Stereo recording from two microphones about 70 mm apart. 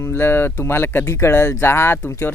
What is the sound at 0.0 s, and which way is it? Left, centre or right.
A man's voice, left.